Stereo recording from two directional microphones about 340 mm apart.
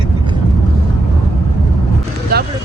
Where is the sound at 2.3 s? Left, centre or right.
Right.